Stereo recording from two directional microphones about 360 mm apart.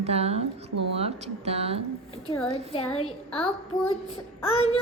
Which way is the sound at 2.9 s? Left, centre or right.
Centre.